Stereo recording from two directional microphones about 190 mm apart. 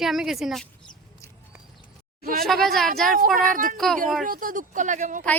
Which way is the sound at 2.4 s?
Centre (ahead or behind).